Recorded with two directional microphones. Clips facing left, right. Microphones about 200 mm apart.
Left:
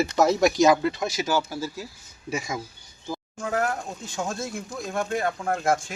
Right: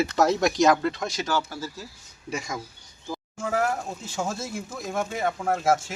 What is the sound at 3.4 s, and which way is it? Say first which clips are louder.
Speech: right 1 dB; 5° right (ahead or behind).